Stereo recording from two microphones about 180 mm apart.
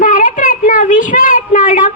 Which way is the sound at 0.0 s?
45° left (ahead or behind).